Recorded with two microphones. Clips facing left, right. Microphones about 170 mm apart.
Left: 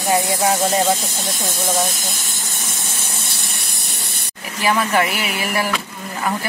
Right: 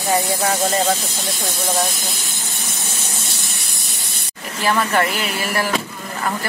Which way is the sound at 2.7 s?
55° left (ahead or behind).